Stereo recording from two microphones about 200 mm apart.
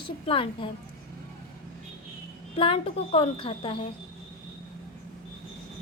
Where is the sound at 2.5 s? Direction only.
30° left (ahead or behind).